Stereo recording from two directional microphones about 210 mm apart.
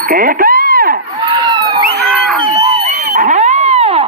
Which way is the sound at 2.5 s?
20° right (ahead or behind).